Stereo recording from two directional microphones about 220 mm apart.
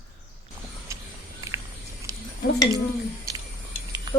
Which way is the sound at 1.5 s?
15° right (ahead or behind).